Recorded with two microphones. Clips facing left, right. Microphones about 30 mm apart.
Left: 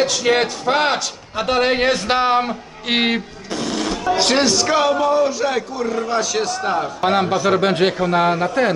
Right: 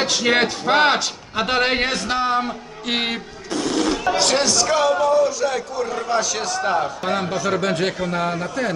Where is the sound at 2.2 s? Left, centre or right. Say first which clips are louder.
Left 4 dB; left; by 4.0 s centre.